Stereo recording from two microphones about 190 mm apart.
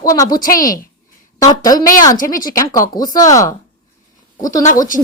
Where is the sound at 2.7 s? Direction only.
20° left (ahead or behind).